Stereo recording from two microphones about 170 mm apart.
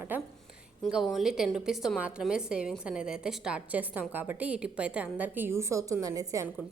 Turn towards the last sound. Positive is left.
turn(degrees=-15)  # may be behind; listen again after turning